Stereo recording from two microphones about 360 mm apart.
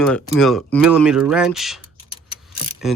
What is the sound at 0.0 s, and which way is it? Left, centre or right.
Speech, centre.